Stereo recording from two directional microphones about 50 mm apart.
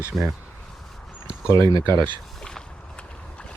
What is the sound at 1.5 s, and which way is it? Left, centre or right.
Speech, left.